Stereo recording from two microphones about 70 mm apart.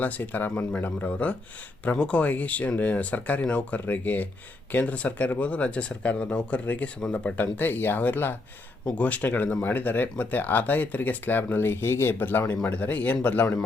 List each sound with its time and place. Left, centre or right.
0.0 s speech: left
7.4 s speech: left